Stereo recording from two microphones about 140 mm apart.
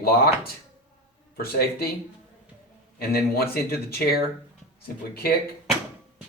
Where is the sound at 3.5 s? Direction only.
90° left.